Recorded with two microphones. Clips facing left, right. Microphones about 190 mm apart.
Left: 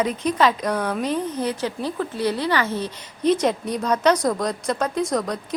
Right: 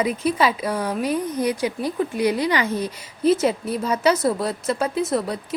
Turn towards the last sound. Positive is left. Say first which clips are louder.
# even
turn(degrees=-5)  # may be behind; listen again after turning